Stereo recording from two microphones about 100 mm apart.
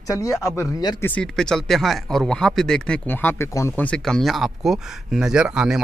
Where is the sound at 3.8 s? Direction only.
10° left (ahead or behind); by 5.8 s 10° right (ahead or behind).